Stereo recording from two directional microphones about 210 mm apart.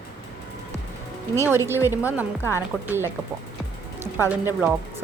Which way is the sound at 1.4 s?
10° right (ahead or behind).